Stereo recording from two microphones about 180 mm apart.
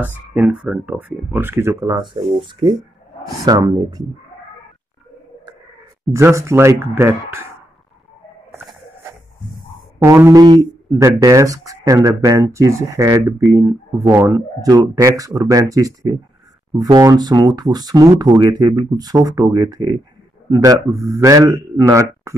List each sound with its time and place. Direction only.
0.3 s speech: 10° right (ahead or behind)
6.0 s speech: 15° right (ahead or behind)
9.9 s speech: 15° right (ahead or behind)